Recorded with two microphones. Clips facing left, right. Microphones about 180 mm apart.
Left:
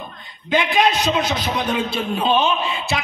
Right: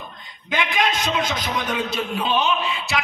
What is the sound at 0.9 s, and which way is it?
Speech, 20° left (ahead or behind).